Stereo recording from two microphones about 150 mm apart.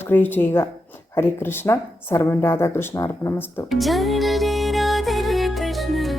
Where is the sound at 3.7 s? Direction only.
Centre (ahead or behind).